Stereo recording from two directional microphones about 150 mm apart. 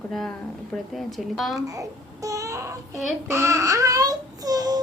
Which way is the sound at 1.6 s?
20° right (ahead or behind).